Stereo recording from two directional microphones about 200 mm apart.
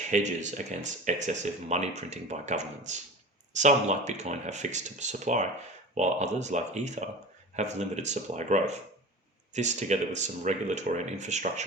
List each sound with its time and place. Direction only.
0.1 s speech: 35° right (ahead or behind)